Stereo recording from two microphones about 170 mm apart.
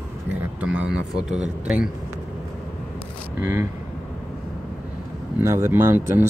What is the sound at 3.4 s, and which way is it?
Speech, 15° right (ahead or behind).